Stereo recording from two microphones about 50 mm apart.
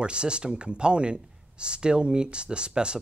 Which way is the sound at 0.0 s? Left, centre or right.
Centre.